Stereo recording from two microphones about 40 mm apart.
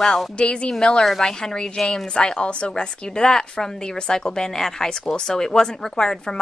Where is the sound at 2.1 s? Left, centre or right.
Left.